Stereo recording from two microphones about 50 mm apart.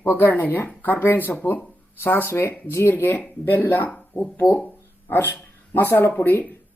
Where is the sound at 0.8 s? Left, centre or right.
Left.